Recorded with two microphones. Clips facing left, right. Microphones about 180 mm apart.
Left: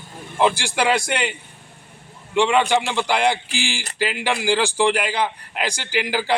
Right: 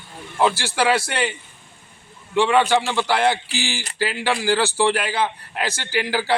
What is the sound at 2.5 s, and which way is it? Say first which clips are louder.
A man's voice: right 1 dB; 10° left (ahead or behind).